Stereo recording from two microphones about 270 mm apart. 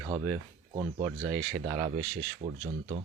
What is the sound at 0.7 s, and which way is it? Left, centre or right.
Speech, centre.